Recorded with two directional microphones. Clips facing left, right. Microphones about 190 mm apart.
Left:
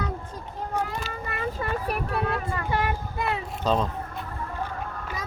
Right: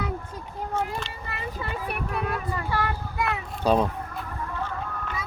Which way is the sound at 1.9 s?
30° left (ahead or behind).